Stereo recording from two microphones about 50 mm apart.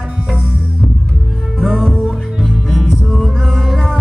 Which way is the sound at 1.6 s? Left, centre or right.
Centre.